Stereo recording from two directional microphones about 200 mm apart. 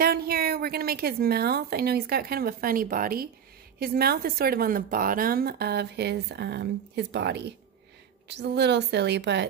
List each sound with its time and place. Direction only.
0.0 s a woman's voice: 50° right (ahead or behind)